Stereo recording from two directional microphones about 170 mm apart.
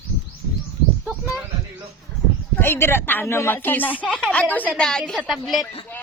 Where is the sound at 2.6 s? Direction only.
15° left (ahead or behind).